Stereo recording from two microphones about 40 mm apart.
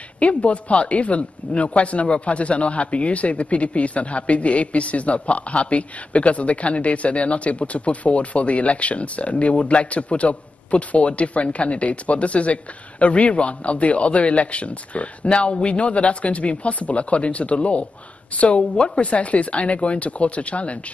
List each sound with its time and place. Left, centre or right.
0.2 s speech: left